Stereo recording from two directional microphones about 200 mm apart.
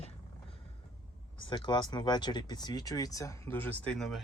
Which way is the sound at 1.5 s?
20° left (ahead or behind).